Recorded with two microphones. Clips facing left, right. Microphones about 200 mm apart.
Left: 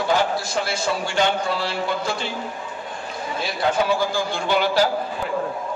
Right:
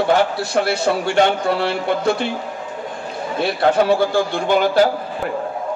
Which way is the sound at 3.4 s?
60° right (ahead or behind).